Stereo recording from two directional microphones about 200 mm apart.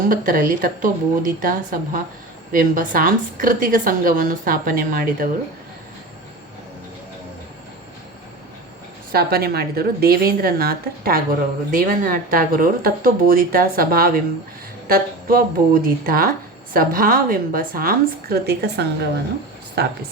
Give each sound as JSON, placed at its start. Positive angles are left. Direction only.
{"t": 0.1, "sound": "a woman's voice", "side_deg": -45}
{"t": 9.1, "sound": "a woman's voice", "side_deg": -50}